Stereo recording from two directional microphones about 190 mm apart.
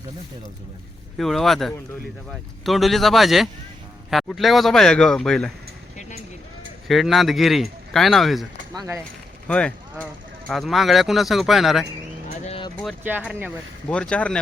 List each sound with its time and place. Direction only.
1.2 s speech: centre (ahead or behind)
6.8 s speech: centre (ahead or behind)
8.7 s speech: 20° right (ahead or behind)
9.5 s speech: 5° left (ahead or behind)
12.3 s vehicle: 30° left (ahead or behind)
13.0 s speech: 10° right (ahead or behind)
13.9 s speech: 5° left (ahead or behind)